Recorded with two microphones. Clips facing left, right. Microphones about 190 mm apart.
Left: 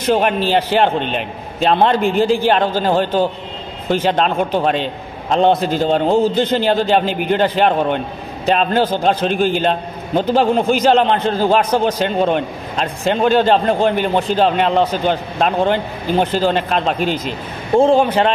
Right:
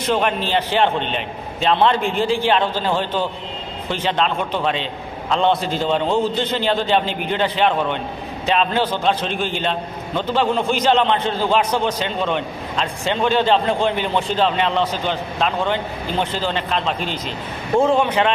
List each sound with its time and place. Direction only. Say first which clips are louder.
0.7 s a man's voice: left 3 dB; 45° left (ahead or behind)
2.0 s a man's voice: left 5 dB; 5° left (ahead or behind)
2.2 s a man's voice: left 4 dB; 45° left (ahead or behind)
17.7 s a man's voice: left 4 dB; 30° left (ahead or behind)